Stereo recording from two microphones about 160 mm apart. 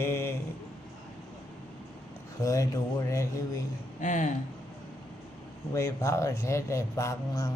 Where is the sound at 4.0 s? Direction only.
50° left (ahead or behind).